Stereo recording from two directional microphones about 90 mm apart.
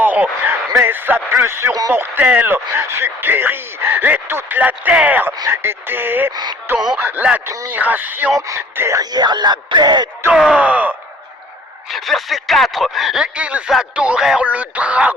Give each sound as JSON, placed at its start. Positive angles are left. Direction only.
{"t": 0.0, "sound": "speech", "side_deg": -20}
{"t": 6.3, "sound": "music", "side_deg": -50}
{"t": 7.0, "sound": "speech", "side_deg": -20}
{"t": 7.8, "sound": "speech", "side_deg": -20}
{"t": 8.4, "sound": "speech", "side_deg": -35}
{"t": 8.7, "sound": "speech", "side_deg": -25}
{"t": 9.0, "sound": "speech", "side_deg": -50}
{"t": 10.3, "sound": "a sound", "side_deg": -10}
{"t": 11.9, "sound": "speech", "side_deg": 0}